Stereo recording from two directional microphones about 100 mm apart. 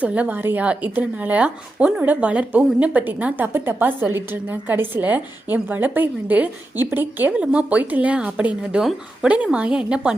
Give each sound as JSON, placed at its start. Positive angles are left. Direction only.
{"t": 0.0, "sound": "a woman's voice", "side_deg": -15}